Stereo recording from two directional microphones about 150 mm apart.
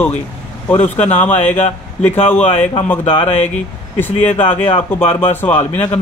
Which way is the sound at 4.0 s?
15° left (ahead or behind).